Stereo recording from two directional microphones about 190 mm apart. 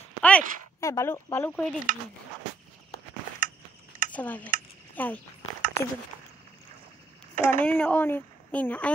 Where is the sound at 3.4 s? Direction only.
45° right (ahead or behind).